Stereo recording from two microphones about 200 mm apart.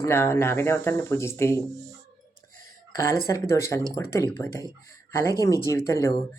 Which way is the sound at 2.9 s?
15° left (ahead or behind).